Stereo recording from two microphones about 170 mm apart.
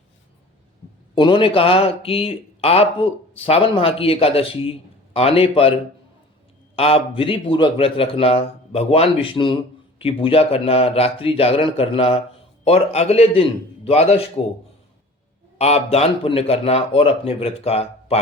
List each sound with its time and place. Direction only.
1.1 s speech: 30° left (ahead or behind)
6.7 s speech: 35° left (ahead or behind)
15.5 s speech: 40° left (ahead or behind)